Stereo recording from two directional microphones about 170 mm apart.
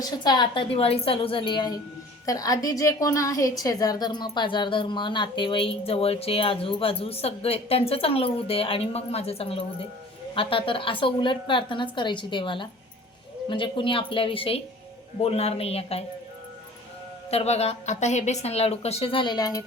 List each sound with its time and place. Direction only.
0.0 s a woman's voice: 25° left (ahead or behind)
17.3 s a woman's voice: 40° left (ahead or behind); by 19.6 s 20° left (ahead or behind)